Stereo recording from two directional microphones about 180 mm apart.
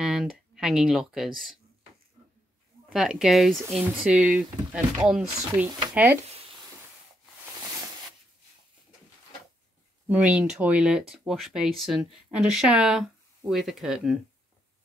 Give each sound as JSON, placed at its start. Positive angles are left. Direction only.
{"t": 0.0, "sound": "speech", "side_deg": -5}
{"t": 2.9, "sound": "speech", "side_deg": -5}
{"t": 5.7, "sound": "speech", "side_deg": -25}
{"t": 10.0, "sound": "speech", "side_deg": -5}